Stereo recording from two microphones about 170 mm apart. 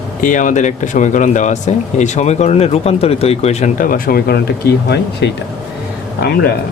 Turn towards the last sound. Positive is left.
turn(degrees=65)  # may be behind; listen again after turning